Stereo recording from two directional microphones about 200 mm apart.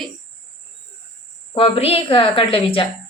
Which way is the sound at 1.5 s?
25° left (ahead or behind).